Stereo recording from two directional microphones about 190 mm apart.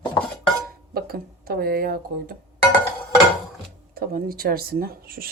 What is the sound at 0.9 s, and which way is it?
Speech, 55° right (ahead or behind).